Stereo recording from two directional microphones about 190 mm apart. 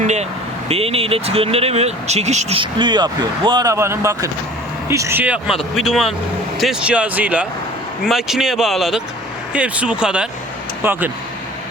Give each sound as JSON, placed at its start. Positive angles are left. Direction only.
{"t": 0.0, "sound": "vehicle", "side_deg": -35}
{"t": 0.7, "sound": "speech", "side_deg": -30}